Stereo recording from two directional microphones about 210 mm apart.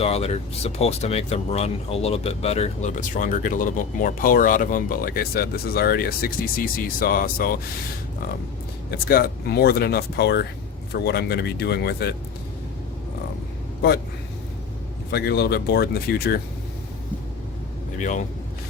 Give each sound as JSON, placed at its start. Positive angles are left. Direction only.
{"t": 0.0, "sound": "speech", "side_deg": 30}
{"t": 8.9, "sound": "speech", "side_deg": 45}
{"t": 15.1, "sound": "speech", "side_deg": 50}
{"t": 17.9, "sound": "speech", "side_deg": 35}